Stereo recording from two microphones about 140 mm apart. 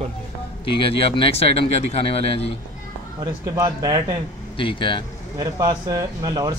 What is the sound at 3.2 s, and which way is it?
Speech, 30° right (ahead or behind).